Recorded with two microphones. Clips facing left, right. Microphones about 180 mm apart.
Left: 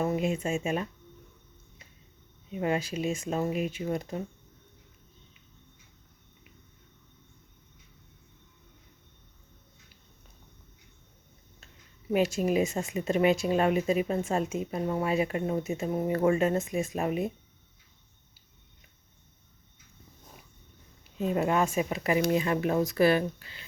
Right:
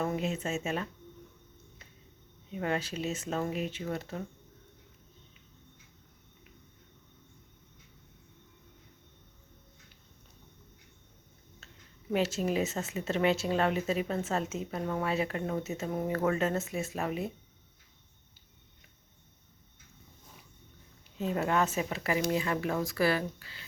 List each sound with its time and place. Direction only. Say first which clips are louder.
0.0 s speech: left 4 dB; 10° left (ahead or behind)
2.6 s speech: left 4 dB; 10° left (ahead or behind)
12.1 s speech: left 4 dB; 15° left (ahead or behind)
21.2 s speech: left 3 dB; 15° left (ahead or behind)